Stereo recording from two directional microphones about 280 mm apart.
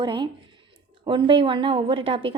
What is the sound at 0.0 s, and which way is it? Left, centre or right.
A woman's voice, centre.